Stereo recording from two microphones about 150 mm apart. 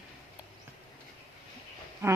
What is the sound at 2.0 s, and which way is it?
Speech, 20° right (ahead or behind).